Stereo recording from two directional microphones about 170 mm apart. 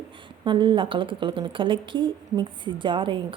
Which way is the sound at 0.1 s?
30° right (ahead or behind).